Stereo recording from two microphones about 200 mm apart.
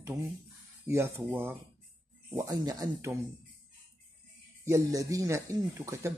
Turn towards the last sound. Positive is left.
turn(degrees=-15)  # may be behind; listen again after turning